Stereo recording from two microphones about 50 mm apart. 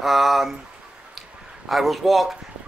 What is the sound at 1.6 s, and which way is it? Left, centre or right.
Speech, centre.